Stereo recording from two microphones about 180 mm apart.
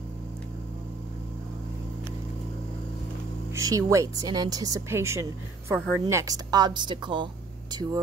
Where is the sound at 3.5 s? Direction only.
20° right (ahead or behind).